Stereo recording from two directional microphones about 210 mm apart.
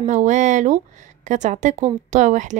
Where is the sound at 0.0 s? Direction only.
35° right (ahead or behind).